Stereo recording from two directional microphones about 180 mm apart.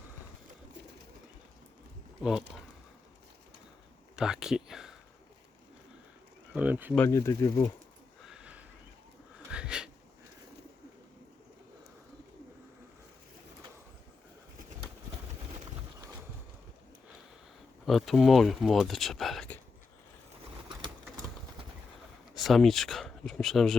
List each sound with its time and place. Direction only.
4.1 s speech: 5° right (ahead or behind)
6.5 s speech: 10° right (ahead or behind)
6.9 s speech: 10° left (ahead or behind)
8.2 s a sound: 5° right (ahead or behind)
17.8 s speech: centre (ahead or behind)
22.4 s speech: centre (ahead or behind)